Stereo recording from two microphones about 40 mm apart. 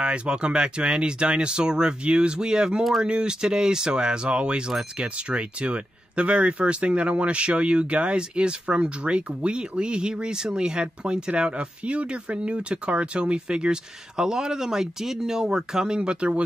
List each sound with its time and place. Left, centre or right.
0.0 s speech: right